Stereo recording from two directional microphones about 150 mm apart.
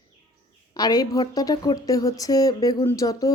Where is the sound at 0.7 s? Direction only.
25° left (ahead or behind).